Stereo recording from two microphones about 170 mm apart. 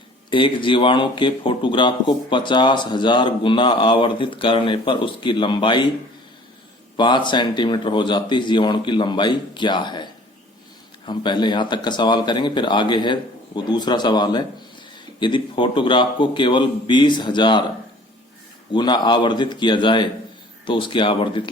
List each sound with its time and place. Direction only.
0.3 s speech: 30° left (ahead or behind)
6.9 s speech: 25° left (ahead or behind)
18.7 s speech: 25° left (ahead or behind)